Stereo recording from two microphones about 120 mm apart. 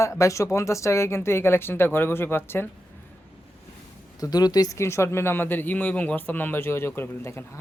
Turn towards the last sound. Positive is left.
turn(degrees=20)  # may be behind; listen again after turning